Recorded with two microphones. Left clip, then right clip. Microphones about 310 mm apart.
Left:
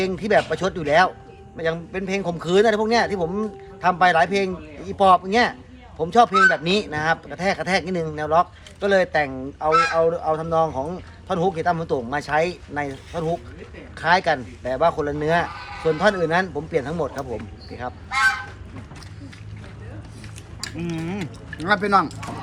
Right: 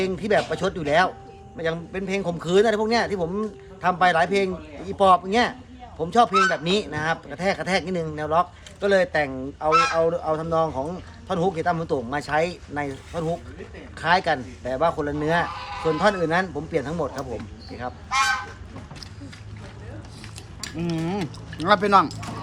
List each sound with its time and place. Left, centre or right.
0.0 s speech: centre
15.5 s sheep: centre
15.8 s speech: centre
20.7 s speech: right